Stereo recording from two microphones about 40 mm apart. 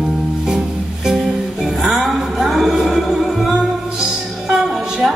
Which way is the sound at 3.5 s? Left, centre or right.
Right.